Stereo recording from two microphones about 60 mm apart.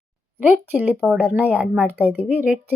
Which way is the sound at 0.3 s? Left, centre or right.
Right.